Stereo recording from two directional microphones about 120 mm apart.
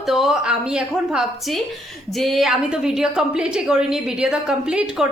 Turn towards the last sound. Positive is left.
turn(degrees=-5)  # may be behind; listen again after turning